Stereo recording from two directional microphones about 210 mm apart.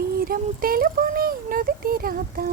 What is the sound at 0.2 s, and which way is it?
Speech, 45° right (ahead or behind).